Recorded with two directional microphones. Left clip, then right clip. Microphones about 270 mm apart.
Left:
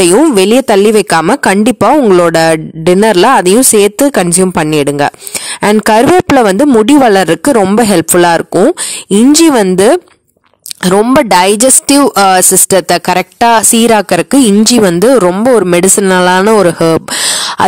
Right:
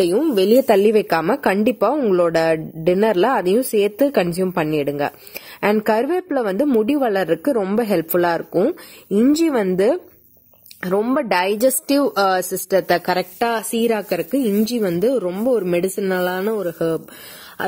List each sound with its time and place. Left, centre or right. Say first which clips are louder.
0.1 s speech: left 9 dB; left